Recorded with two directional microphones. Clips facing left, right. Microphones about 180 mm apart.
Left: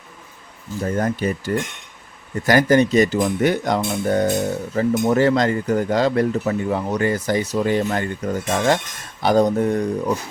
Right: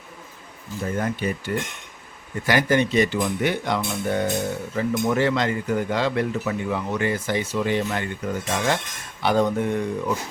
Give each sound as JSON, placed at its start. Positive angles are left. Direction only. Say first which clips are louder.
{"t": 0.8, "sound": "speech", "louder": "left 4 dB", "side_deg": 40}